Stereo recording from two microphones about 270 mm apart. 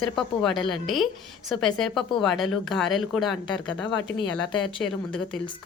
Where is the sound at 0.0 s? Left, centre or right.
Centre.